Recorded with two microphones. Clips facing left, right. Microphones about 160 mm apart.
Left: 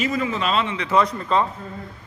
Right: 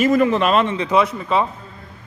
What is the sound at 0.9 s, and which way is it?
Speech, 10° right (ahead or behind).